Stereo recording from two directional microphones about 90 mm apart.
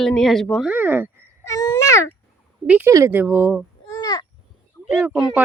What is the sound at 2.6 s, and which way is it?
Speech, 15° right (ahead or behind).